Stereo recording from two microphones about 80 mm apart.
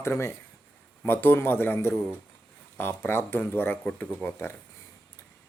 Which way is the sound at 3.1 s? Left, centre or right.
Left.